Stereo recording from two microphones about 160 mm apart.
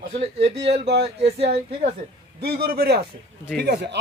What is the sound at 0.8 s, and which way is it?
Speech, 90° right.